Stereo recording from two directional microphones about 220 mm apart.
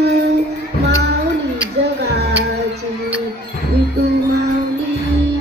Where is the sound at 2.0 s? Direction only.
50° right (ahead or behind).